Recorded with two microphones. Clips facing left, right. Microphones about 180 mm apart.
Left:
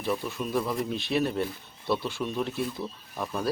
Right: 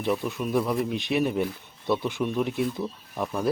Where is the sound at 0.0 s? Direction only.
20° right (ahead or behind).